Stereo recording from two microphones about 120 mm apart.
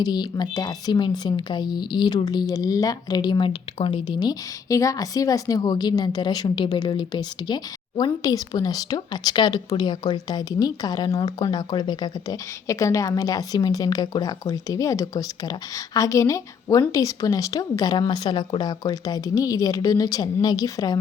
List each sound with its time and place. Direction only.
0.0 s a woman's voice: 35° left (ahead or behind)